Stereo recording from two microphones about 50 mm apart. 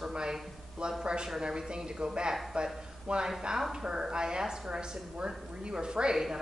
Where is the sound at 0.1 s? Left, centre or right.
Centre.